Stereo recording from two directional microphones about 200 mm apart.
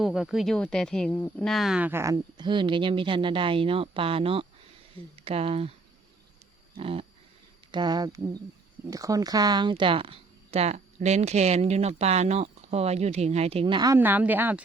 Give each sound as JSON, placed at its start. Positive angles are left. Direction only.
{"t": 0.0, "sound": "speech", "side_deg": 0}
{"t": 6.7, "sound": "a sound", "side_deg": -25}
{"t": 7.7, "sound": "speech", "side_deg": -20}